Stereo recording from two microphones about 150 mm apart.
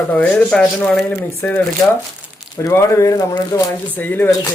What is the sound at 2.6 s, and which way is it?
Speech, 20° left (ahead or behind).